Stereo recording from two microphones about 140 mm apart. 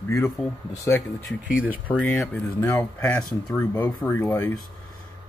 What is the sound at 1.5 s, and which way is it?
Speech, 10° right (ahead or behind).